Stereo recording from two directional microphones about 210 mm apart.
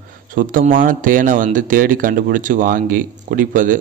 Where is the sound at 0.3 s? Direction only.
40° right (ahead or behind).